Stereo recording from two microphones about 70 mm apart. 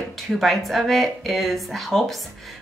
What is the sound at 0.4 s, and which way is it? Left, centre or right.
A woman's voice, centre.